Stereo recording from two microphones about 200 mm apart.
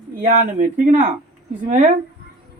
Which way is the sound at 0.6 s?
40° right (ahead or behind).